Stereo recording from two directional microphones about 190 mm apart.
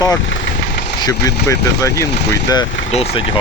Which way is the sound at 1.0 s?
20° left (ahead or behind).